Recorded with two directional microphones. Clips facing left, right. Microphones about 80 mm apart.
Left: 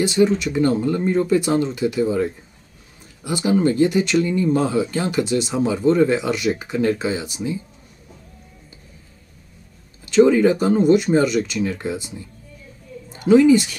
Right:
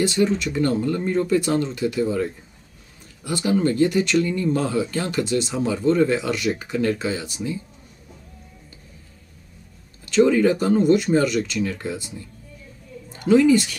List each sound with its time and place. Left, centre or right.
0.0 s speech: centre
10.0 s speech: centre
13.1 s a woman's voice: centre